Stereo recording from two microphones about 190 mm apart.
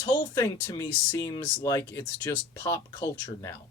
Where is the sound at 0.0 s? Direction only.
20° left (ahead or behind).